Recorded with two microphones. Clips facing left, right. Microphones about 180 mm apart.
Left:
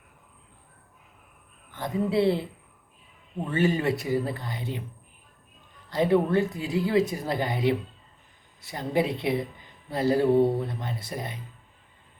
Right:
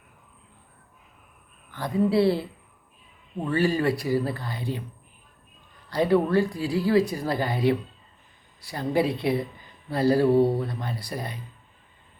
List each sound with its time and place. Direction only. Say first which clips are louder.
1.7 s speech: right 3 dB; 20° left (ahead or behind)
3.5 s speech: right 1 dB; 20° left (ahead or behind)
5.9 s speech: right 1 dB; 20° left (ahead or behind)
10.3 s speech: right 1 dB; centre (ahead or behind)
10.6 s speech: right 1 dB; 20° left (ahead or behind)